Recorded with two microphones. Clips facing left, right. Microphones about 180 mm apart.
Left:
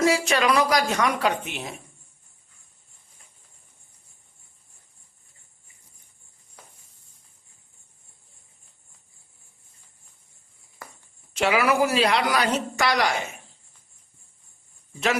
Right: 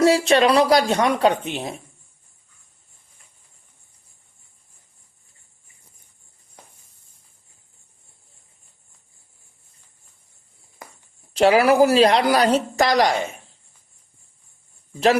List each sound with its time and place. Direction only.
0.0 s speech: 35° right (ahead or behind)
10.8 s a sound: 15° right (ahead or behind)
11.3 s speech: 35° right (ahead or behind)